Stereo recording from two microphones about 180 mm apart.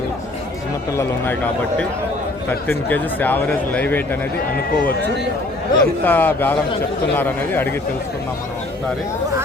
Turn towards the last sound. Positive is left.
turn(degrees=10)  # may be behind; listen again after turning